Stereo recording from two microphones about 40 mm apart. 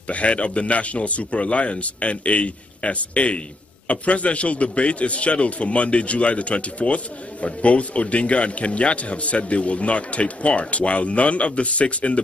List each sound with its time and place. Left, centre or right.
0.1 s speech: left